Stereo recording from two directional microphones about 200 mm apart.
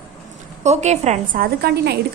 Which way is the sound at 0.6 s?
35° right (ahead or behind).